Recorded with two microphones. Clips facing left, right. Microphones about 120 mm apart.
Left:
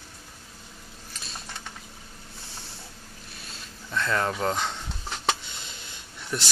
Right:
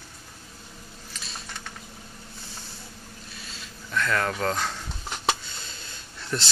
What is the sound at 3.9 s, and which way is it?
Speech, 25° left (ahead or behind).